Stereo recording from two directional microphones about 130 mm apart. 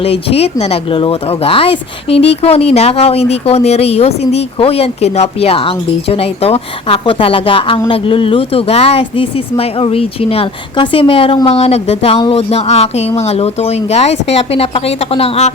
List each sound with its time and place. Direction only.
0.0 s speech: 50° left (ahead or behind)